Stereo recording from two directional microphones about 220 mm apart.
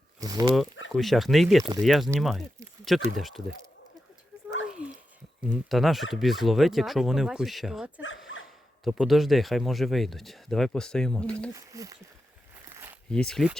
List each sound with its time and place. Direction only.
0.2 s speech: 15° right (ahead or behind)
0.9 s speech: centre (ahead or behind)
4.8 s dog: 5° right (ahead or behind)
5.5 s speech: centre (ahead or behind)
11.5 s speech: 15° right (ahead or behind)
12.6 s a sound: 10° right (ahead or behind)
13.1 s speech: 5° left (ahead or behind)